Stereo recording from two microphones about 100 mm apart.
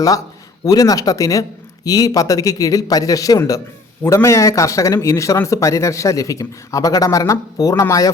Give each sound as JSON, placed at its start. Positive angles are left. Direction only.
{"t": 0.6, "sound": "speech", "side_deg": 40}